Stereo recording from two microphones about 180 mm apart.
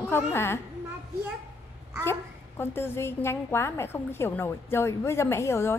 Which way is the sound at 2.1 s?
15° left (ahead or behind).